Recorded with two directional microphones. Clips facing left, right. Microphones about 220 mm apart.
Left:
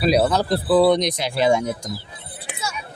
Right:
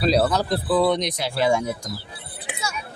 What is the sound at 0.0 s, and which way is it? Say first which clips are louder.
Speech: left 2 dB; 10° left (ahead or behind).